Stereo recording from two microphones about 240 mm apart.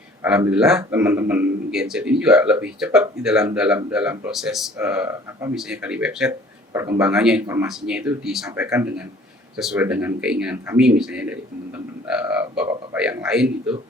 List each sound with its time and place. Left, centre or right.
0.2 s a man's voice: centre